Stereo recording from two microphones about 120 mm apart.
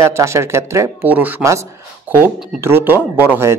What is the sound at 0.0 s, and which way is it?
Speech, 25° right (ahead or behind).